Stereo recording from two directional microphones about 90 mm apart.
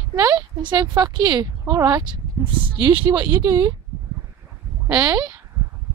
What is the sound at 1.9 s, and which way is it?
Speech, 50° right (ahead or behind).